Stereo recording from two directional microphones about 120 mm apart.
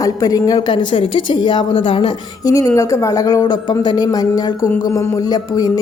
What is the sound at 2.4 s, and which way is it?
A woman's voice, 25° left (ahead or behind).